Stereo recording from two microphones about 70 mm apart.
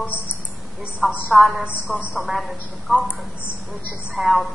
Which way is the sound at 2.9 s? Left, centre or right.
Centre.